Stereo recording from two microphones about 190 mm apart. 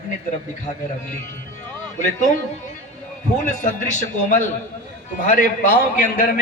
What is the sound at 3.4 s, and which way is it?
Speech, 40° left (ahead or behind).